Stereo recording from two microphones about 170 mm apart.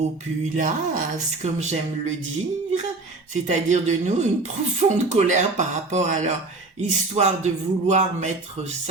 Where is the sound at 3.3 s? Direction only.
45° right (ahead or behind).